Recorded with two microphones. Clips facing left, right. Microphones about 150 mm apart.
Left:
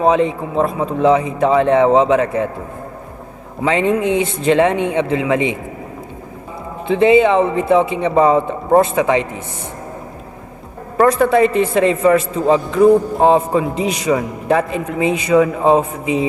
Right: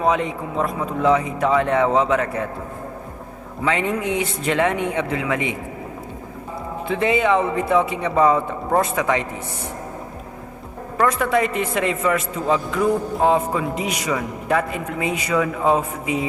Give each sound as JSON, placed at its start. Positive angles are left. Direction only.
{"t": 0.0, "sound": "a man's voice", "side_deg": 25}
{"t": 3.6, "sound": "a man's voice", "side_deg": 25}
{"t": 6.8, "sound": "a man's voice", "side_deg": 25}
{"t": 10.9, "sound": "a man's voice", "side_deg": 35}